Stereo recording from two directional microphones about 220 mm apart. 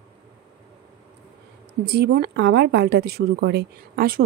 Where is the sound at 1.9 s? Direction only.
45° right (ahead or behind).